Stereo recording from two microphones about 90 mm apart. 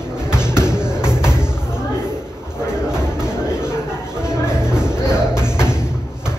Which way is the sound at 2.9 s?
10° right (ahead or behind).